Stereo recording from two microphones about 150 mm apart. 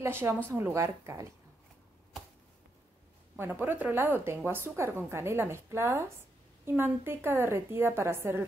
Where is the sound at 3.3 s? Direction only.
15° right (ahead or behind).